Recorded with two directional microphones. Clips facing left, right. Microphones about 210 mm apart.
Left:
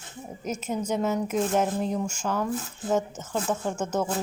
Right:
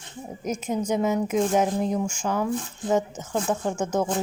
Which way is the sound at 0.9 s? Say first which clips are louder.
Right 3 dB; 10° right (ahead or behind).